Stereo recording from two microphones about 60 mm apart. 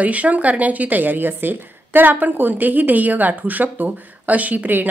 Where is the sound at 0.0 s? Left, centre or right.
Right.